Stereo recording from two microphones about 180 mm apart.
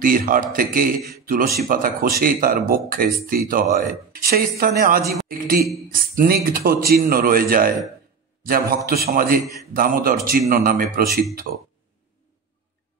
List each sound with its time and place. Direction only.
0.0 s a man's voice: 50° right (ahead or behind)